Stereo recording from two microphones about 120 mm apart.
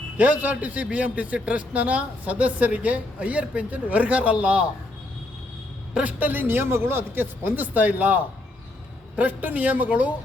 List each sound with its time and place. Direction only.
0.2 s a man's voice: 15° right (ahead or behind)
5.9 s a man's voice: 10° right (ahead or behind)